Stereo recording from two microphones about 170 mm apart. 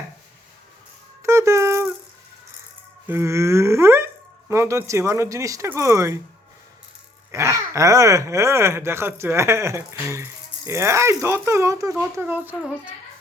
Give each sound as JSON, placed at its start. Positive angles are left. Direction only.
{"t": 1.2, "sound": "music", "side_deg": -15}
{"t": 3.1, "sound": "speech", "side_deg": -15}
{"t": 7.3, "sound": "speech", "side_deg": -15}